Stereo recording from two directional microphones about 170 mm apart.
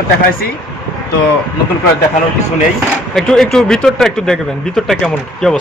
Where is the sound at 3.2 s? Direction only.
Centre (ahead or behind).